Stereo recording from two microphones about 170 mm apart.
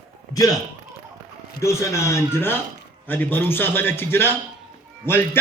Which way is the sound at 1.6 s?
15° left (ahead or behind).